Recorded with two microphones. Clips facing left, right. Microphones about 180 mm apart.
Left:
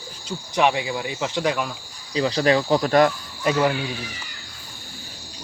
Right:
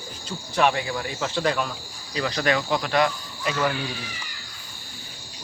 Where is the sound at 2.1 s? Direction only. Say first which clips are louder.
Left 5 dB; 30° left (ahead or behind); by 3.6 s 45° left (ahead or behind).